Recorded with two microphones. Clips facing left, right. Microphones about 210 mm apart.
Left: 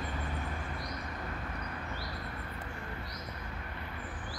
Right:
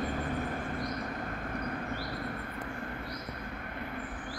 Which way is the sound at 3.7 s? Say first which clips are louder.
Right 5 dB; 50° right (ahead or behind).